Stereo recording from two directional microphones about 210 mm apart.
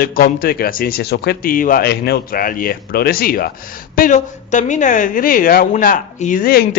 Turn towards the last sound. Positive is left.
turn(degrees=45)  # may be behind; listen again after turning